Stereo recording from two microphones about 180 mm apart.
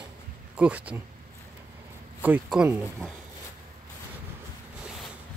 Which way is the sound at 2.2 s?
5° right (ahead or behind).